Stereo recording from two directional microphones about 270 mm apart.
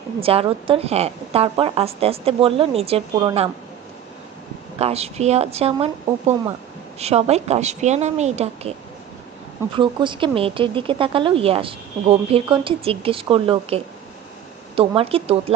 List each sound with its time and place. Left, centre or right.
0.2 s speech: right
4.8 s speech: right
9.7 s speech: centre